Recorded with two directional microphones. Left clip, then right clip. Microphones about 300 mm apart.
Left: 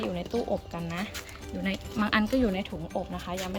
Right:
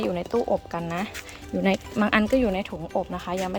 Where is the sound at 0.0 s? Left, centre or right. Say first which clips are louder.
Right 6 dB; centre.